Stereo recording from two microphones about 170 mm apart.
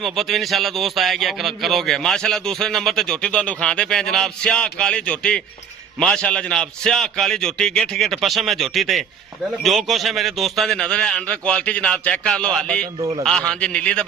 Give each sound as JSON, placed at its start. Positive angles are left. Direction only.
{"t": 0.0, "sound": "a man's voice", "side_deg": 0}
{"t": 13.0, "sound": "a man's voice", "side_deg": -25}
{"t": 13.5, "sound": "a man's voice", "side_deg": 5}